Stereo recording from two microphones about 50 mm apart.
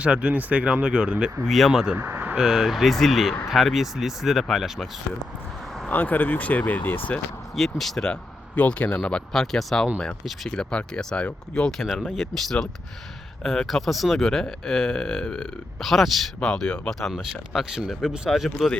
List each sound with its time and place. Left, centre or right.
0.0 s speech: right
1.5 s speech: centre
2.0 s a sound: right
2.3 s speech: centre
5.9 s speech: left
7.8 s speech: centre
8.0 s speech: left
9.3 s speech: centre
10.5 s speech: centre
12.1 s speech: centre
16.4 s speech: centre
17.1 s speech: centre
18.3 s speech: centre